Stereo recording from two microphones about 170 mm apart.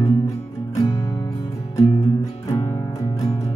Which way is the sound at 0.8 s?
20° left (ahead or behind).